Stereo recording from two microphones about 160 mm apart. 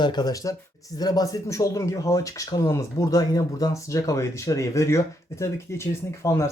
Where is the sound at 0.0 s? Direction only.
25° left (ahead or behind).